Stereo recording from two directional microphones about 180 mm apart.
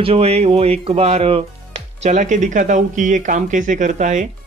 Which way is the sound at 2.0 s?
45° right (ahead or behind).